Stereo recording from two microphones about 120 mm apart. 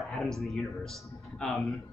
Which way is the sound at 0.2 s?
Centre (ahead or behind).